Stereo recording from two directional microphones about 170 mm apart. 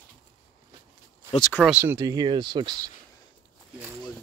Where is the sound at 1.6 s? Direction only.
10° right (ahead or behind); by 2.9 s 25° right (ahead or behind).